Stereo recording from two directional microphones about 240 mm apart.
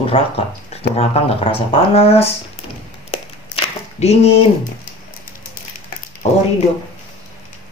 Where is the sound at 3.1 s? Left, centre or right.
Left.